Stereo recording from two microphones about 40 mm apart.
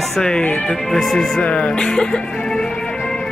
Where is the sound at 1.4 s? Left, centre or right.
Left.